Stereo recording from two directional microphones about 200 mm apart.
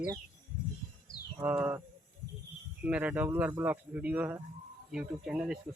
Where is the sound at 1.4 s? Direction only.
10° right (ahead or behind).